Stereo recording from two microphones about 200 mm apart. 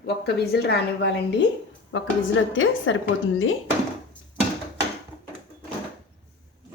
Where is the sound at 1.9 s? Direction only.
75° left (ahead or behind).